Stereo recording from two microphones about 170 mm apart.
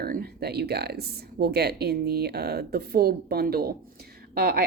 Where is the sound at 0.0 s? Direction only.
60° right (ahead or behind).